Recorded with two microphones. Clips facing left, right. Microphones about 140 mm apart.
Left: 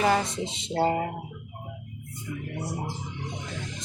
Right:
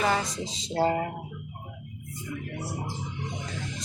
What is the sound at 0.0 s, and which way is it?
Speech, 30° left (ahead or behind).